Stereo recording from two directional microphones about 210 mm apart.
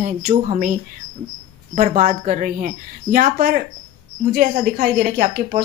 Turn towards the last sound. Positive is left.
turn(degrees=-40)  # may be behind; listen again after turning